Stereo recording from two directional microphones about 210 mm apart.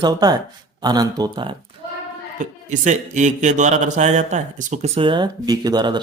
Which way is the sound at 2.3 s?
35° right (ahead or behind).